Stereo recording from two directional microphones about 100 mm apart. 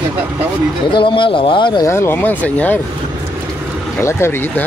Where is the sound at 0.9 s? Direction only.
55° left (ahead or behind).